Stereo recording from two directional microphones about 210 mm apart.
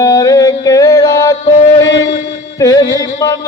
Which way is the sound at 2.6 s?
15° left (ahead or behind).